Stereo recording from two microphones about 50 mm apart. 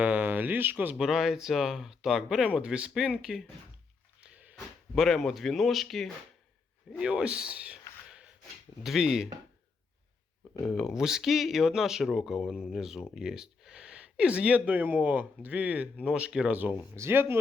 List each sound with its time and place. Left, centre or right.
0.0 s speech: right
0.9 s speech: centre
2.6 s speech: right
4.2 s a sound: right
4.5 s speech: centre
6.9 s speech: centre
8.8 s speech: centre
10.8 s speech: centre
13.1 s a sound: centre
14.0 s speech: right
16.0 s speech: centre
16.5 s speech: right
17.1 s speech: right